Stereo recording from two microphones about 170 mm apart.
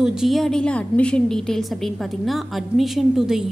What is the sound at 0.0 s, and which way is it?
A woman's voice, 5° right (ahead or behind).